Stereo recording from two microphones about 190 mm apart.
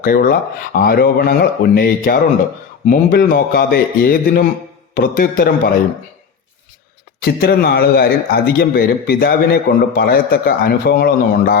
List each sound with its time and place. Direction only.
0.0 s a man's voice: 50° left (ahead or behind)
7.2 s a man's voice: 55° left (ahead or behind)